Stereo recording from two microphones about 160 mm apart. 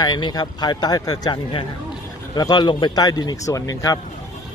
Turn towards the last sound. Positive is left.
turn(degrees=20)  # may be behind; listen again after turning